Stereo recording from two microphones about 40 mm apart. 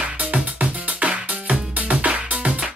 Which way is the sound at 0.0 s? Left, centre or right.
Right.